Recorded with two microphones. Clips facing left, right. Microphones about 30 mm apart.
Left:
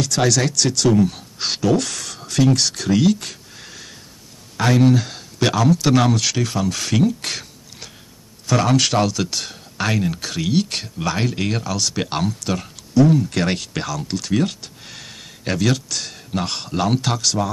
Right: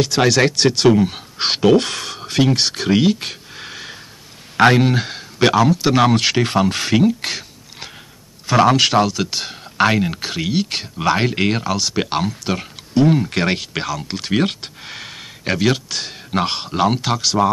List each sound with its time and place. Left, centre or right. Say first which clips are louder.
0.0 s speech: right 4 dB; right
4.8 s speech: left 3 dB; right
6.1 s speech: right 5 dB; right
6.8 s speech: right 3 dB; right
8.5 s speech: right 4 dB; right
11.0 s speech: right 6 dB; right
12.9 s speech: even; right
13.4 s speech: right 2 dB; right
14.1 s speech: right 1 dB; right
14.8 s a sound: right 5 dB; right
16.3 s speech: right 5 dB; right